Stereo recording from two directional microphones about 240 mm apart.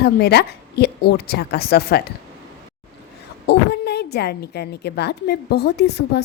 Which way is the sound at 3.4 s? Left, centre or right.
Left.